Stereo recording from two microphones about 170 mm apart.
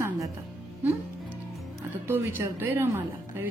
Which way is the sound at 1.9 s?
10° right (ahead or behind).